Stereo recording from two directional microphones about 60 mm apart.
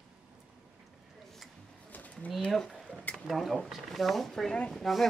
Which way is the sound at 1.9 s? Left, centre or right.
Left.